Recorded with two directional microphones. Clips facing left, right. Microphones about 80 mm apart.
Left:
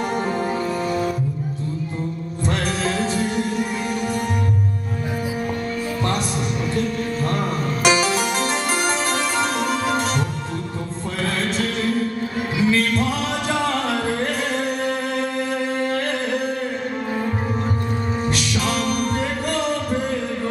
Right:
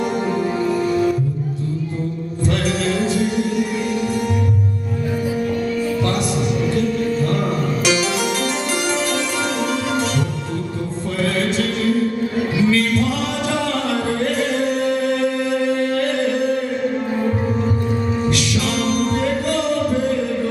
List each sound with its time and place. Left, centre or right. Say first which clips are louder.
0.1 s music: right 2 dB; left
2.5 s music: right 3 dB; left
7.8 s harpsichord: left 3 dB; left
9.7 s music: right 1 dB; left
18.3 s music: right 2 dB; left